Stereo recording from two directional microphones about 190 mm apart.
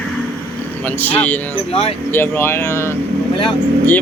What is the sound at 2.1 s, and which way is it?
Speech, 10° left (ahead or behind).